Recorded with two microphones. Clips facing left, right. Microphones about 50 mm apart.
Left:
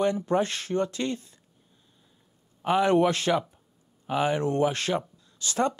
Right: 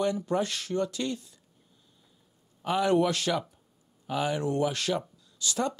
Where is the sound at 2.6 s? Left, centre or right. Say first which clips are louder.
Left 3 dB; left.